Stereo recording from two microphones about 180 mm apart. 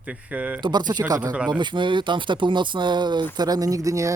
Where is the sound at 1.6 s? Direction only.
25° right (ahead or behind).